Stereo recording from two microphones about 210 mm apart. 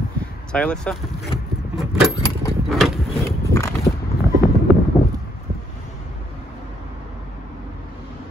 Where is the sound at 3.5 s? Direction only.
15° left (ahead or behind).